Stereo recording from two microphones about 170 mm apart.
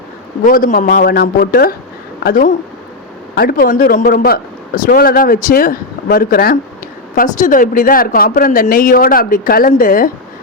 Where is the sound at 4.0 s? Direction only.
65° left (ahead or behind).